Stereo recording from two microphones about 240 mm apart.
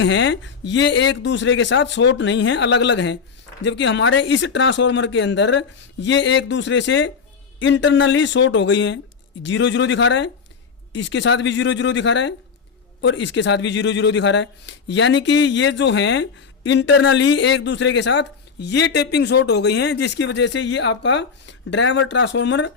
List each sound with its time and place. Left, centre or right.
0.0 s speech: left